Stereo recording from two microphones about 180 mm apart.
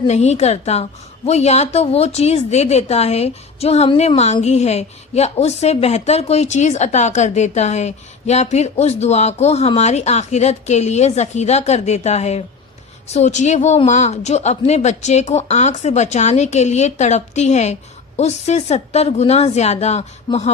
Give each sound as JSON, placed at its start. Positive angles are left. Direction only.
{"t": 0.1, "sound": "a woman's voice", "side_deg": 40}